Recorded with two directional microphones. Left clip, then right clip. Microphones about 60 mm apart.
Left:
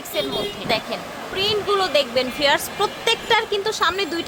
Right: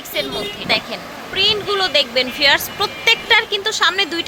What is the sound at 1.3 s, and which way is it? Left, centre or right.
Speech, centre.